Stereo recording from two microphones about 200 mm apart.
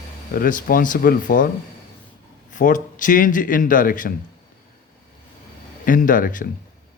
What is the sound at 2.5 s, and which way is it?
A man's voice, 40° left (ahead or behind).